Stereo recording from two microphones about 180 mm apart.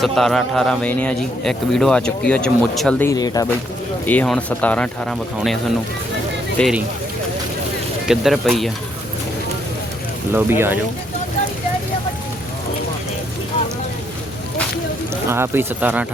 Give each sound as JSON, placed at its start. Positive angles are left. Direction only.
{"t": 0.0, "sound": "a man's voice", "side_deg": 0}
{"t": 3.1, "sound": "speech", "side_deg": 20}
{"t": 4.0, "sound": "speech", "side_deg": 10}
{"t": 6.6, "sound": "a man's voice", "side_deg": 0}
{"t": 8.0, "sound": "a man's voice", "side_deg": 0}
{"t": 10.3, "sound": "speech", "side_deg": -10}
{"t": 15.1, "sound": "speech", "side_deg": -15}